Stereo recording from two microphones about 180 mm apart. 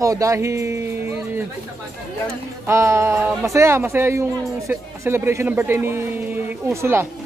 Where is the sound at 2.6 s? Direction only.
15° right (ahead or behind).